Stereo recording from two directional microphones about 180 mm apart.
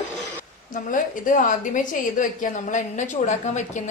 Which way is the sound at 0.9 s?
45° left (ahead or behind).